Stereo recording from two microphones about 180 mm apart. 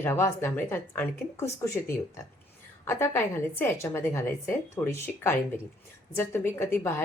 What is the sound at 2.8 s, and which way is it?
A woman's voice, 15° left (ahead or behind).